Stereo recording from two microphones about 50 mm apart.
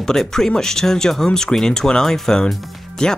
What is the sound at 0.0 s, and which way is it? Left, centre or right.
Speech, centre.